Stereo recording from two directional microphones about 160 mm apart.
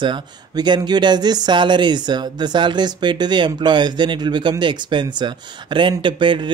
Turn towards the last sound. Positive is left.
turn(degrees=-30)  # may be behind; listen again after turning